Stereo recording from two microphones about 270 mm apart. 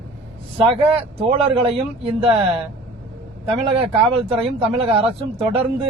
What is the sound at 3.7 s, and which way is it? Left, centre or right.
Speech, right.